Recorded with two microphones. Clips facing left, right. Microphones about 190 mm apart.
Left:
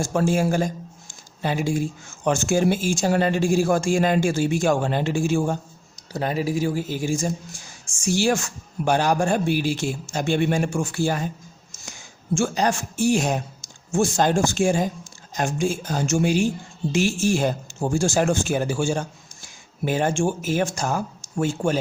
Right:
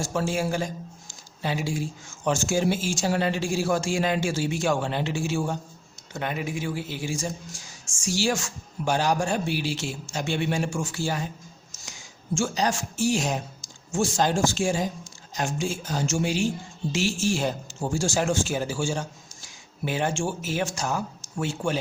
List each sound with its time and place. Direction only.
0.0 s speech: 50° left (ahead or behind)
6.1 s speech: 35° left (ahead or behind)